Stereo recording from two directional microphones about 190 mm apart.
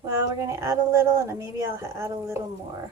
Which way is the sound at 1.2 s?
15° right (ahead or behind).